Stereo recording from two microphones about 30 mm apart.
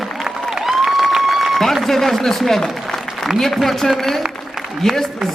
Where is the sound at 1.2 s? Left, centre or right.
Centre.